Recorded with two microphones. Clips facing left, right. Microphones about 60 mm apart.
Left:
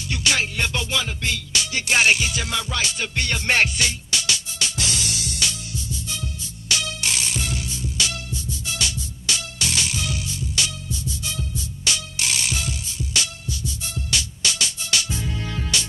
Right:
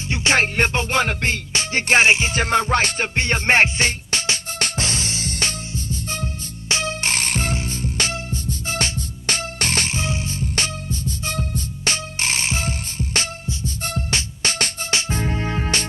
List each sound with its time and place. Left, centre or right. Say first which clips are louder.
0.1 s music: right 4 dB; right
0.4 s music: right 5 dB; right